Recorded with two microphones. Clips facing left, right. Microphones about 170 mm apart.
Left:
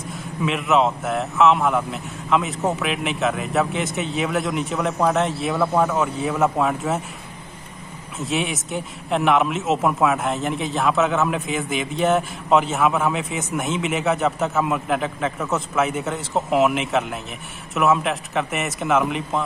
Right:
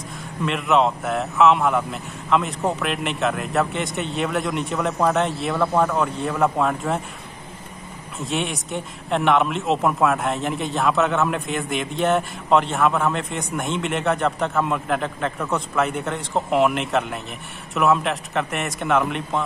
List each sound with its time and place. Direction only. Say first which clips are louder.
0.2 s speech: left 1 dB; centre (ahead or behind)
8.2 s speech: left 1 dB; centre (ahead or behind)